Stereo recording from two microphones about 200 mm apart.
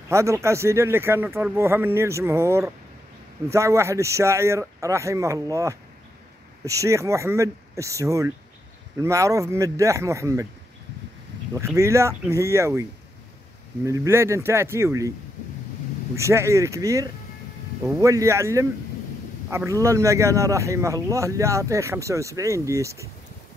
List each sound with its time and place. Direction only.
0.1 s a man's voice: 15° right (ahead or behind)
11.5 s a man's voice: 15° right (ahead or behind)
13.8 s a man's voice: 15° right (ahead or behind)
16.2 s a man's voice: 15° right (ahead or behind)